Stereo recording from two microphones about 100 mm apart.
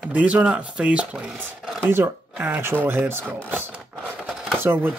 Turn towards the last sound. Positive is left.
turn(degrees=-20)  # may be behind; listen again after turning